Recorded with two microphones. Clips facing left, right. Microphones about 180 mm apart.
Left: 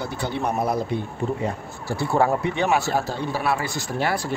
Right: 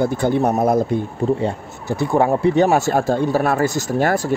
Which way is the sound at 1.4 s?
20° right (ahead or behind).